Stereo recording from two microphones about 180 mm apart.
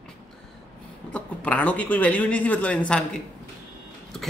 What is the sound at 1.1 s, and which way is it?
Speech, 5° left (ahead or behind).